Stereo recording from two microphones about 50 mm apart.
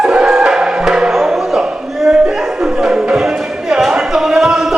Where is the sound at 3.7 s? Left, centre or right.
Centre.